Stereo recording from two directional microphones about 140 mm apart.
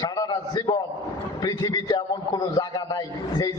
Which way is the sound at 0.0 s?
25° left (ahead or behind).